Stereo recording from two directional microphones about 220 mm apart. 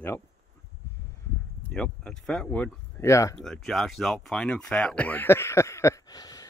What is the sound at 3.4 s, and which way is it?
Speech, centre (ahead or behind).